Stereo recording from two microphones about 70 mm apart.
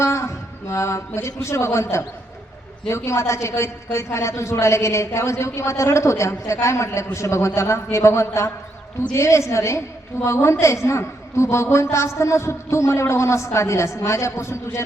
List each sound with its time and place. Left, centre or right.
0.0 s a woman's voice: left